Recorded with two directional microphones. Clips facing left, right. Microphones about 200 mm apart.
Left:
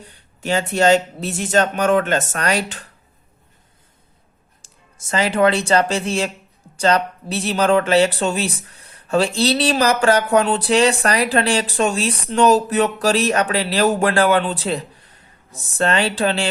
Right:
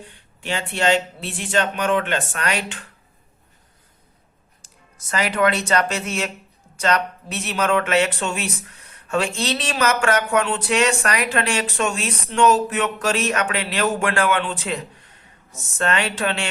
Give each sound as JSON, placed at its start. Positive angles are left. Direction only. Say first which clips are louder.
{"t": 0.0, "sound": "speech", "louder": "left 5 dB", "side_deg": 40}
{"t": 4.6, "sound": "speech", "louder": "even", "side_deg": 25}